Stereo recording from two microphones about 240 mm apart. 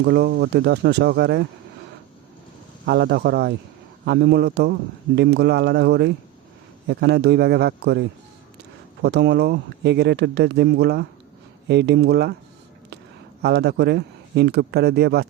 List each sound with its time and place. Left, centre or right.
0.0 s a man's voice: right
2.8 s a man's voice: right
13.4 s a man's voice: right